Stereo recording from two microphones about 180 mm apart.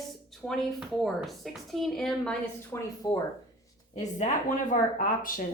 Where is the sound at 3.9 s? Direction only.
45° left (ahead or behind).